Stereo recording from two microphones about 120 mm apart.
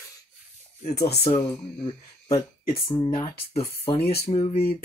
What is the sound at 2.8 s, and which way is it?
Speech, 35° left (ahead or behind).